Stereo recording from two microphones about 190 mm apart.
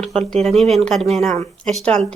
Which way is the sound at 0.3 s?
Centre (ahead or behind).